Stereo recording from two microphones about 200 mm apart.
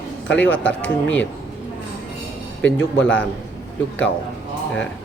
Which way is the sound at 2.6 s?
5° left (ahead or behind).